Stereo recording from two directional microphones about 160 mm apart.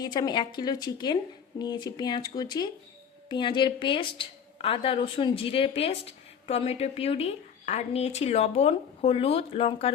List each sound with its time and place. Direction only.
0.0 s a woman's voice: 25° left (ahead or behind)